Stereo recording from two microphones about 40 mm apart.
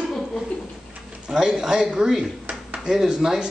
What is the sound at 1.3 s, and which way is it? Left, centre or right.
A man's voice, centre.